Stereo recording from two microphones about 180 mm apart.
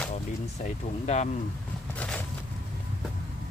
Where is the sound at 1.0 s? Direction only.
40° left (ahead or behind).